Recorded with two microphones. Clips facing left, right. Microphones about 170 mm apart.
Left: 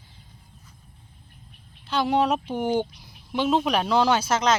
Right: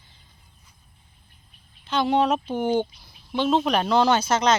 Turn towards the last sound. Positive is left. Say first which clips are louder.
# right 1 dB
turn(degrees=0)  # may be behind; listen again after turning